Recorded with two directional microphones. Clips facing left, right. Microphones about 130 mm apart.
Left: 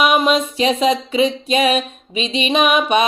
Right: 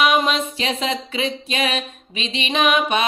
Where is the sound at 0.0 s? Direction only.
15° left (ahead or behind).